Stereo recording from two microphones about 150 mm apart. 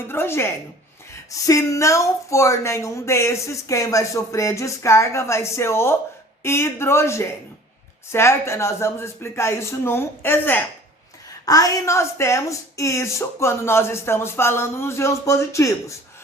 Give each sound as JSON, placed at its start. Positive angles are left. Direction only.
{"t": 0.1, "sound": "speech", "side_deg": 15}